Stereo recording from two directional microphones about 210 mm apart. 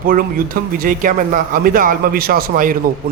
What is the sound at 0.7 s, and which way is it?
A man's voice, 40° right (ahead or behind).